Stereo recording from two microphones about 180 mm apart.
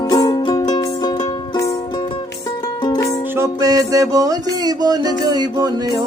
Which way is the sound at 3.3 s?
20° right (ahead or behind).